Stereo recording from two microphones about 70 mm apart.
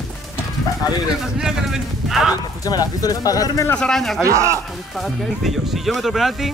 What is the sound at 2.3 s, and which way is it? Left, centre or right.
Speech, left.